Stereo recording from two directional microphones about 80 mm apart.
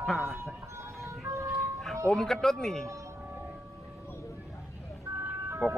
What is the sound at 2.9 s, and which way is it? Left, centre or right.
Music, right.